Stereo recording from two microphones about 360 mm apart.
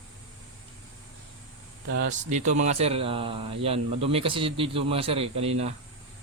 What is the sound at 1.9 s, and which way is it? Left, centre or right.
A man's voice, right.